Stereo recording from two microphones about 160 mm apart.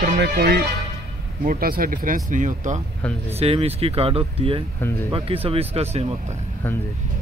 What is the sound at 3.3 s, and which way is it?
Speech, 40° right (ahead or behind).